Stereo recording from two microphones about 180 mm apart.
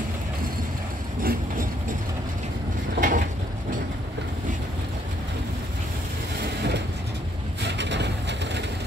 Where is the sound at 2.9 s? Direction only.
45° right (ahead or behind).